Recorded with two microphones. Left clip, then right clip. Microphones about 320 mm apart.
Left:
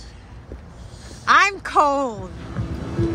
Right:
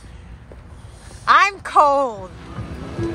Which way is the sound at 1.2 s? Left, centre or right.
Centre.